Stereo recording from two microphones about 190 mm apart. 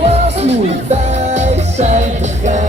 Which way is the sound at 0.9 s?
35° right (ahead or behind).